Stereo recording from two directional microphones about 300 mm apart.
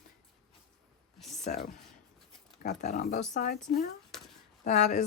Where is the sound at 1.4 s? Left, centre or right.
Left.